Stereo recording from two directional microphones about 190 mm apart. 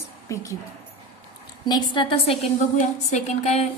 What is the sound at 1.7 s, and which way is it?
A woman's voice, 25° left (ahead or behind).